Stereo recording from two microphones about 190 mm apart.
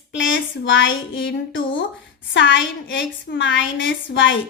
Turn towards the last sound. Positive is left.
turn(degrees=80)